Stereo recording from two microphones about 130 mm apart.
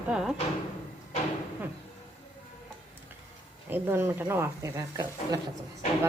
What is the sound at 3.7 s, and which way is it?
A woman's voice, 15° right (ahead or behind).